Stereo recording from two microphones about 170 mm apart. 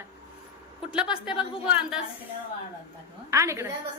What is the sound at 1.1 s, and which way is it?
Speech, 5° right (ahead or behind).